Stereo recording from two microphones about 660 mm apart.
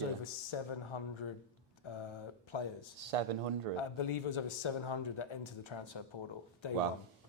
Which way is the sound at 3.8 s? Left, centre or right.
Left.